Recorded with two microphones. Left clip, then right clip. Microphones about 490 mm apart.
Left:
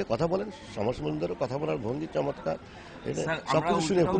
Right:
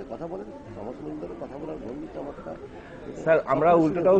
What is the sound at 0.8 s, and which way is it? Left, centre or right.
Speech, left.